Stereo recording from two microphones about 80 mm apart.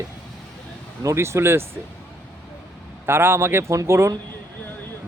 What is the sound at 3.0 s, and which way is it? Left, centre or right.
Speech, right.